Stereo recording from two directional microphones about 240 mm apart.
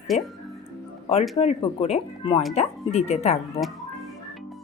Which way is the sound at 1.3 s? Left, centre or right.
Left.